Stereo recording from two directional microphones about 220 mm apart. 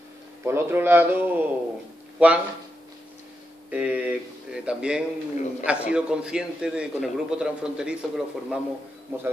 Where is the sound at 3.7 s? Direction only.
5° right (ahead or behind).